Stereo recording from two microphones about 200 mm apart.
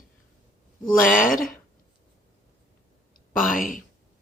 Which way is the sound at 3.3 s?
45° left (ahead or behind).